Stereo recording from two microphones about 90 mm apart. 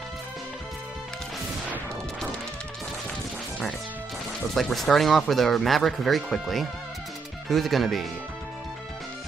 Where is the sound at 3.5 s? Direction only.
5° left (ahead or behind).